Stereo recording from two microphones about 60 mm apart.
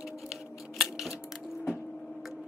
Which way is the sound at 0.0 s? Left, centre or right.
Centre.